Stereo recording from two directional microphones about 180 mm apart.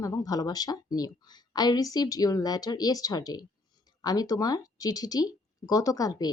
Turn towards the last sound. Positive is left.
turn(degrees=20)  # may be behind; listen again after turning